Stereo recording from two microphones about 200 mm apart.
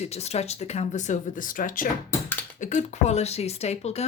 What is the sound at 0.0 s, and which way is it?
Speech, 30° left (ahead or behind).